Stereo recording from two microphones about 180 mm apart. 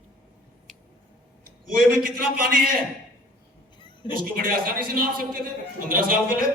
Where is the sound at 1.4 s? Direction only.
50° right (ahead or behind).